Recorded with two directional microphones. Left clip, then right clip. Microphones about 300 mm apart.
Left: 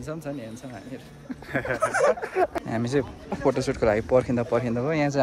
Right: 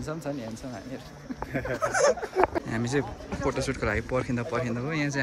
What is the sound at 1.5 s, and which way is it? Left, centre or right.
Speech, centre.